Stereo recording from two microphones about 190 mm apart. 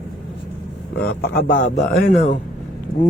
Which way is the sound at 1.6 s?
45° left (ahead or behind).